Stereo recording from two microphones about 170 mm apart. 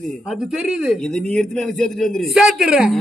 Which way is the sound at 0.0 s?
Centre (ahead or behind).